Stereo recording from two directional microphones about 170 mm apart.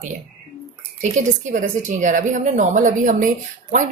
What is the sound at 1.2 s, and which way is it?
A woman's voice, 50° right (ahead or behind).